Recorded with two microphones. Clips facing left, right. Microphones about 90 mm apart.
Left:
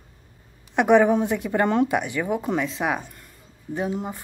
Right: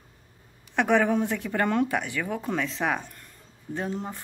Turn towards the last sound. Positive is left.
turn(degrees=10)  # may be behind; listen again after turning